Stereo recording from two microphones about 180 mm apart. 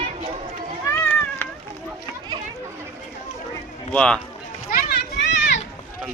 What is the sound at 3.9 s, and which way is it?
Speech, 5° left (ahead or behind).